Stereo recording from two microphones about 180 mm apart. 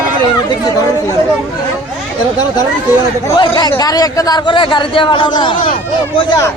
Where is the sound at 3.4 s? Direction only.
20° left (ahead or behind).